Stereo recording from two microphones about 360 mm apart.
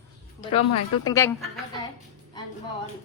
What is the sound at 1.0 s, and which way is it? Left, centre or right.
Speech, centre.